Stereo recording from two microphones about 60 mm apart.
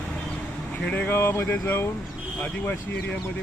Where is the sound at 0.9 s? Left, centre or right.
Left.